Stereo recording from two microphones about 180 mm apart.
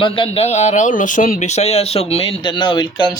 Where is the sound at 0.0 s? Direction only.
30° left (ahead or behind).